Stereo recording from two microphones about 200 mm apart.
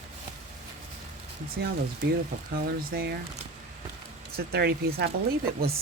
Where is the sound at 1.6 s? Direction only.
50° right (ahead or behind).